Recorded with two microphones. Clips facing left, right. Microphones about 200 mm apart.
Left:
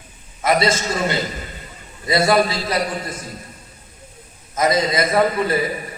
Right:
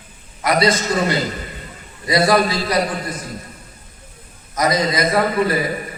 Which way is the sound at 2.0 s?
25° left (ahead or behind).